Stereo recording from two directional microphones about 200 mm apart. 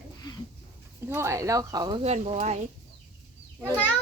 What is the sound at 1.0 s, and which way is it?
Speech, 15° right (ahead or behind).